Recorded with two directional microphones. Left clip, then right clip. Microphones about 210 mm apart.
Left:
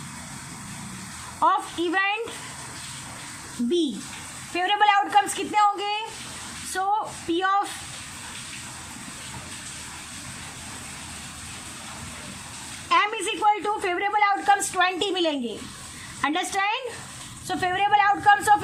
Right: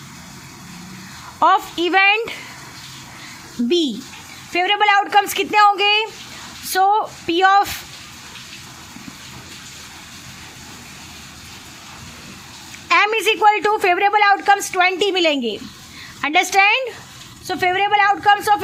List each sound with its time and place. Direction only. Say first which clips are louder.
1.4 s a woman's voice: right 7 dB; 40° right (ahead or behind)
4.5 s a woman's voice: right 5 dB; 30° right (ahead or behind)
12.9 s a woman's voice: right 7 dB; 40° right (ahead or behind)